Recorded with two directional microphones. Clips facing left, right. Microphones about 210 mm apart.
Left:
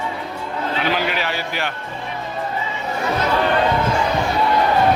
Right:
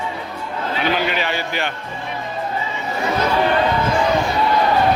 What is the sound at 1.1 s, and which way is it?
Speech, 5° left (ahead or behind).